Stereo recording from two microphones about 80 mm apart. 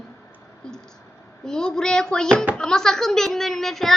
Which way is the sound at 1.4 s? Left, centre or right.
Centre.